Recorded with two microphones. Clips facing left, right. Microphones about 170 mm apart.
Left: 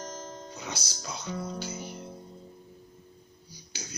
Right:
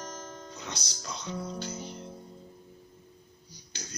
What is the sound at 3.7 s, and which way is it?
Beatboxing, 5° left (ahead or behind).